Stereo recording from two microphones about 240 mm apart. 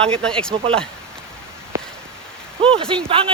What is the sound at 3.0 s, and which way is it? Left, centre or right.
Speech, right.